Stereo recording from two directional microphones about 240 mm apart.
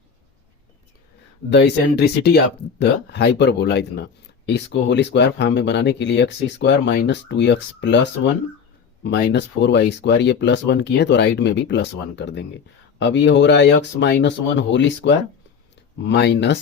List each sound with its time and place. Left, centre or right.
1.5 s speech: left